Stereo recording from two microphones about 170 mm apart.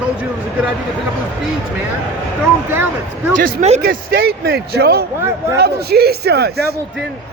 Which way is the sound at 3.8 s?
65° right (ahead or behind).